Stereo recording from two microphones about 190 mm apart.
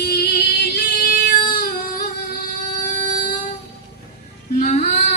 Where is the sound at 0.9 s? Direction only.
50° left (ahead or behind).